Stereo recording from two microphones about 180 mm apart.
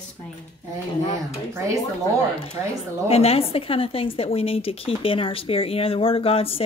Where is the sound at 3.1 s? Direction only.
35° left (ahead or behind).